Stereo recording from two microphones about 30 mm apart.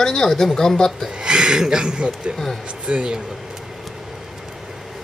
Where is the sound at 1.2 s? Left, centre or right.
Right.